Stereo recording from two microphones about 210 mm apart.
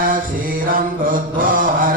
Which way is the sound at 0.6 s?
40° right (ahead or behind).